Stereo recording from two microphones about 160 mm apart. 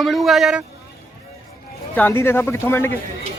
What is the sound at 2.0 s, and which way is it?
Speech, 15° left (ahead or behind).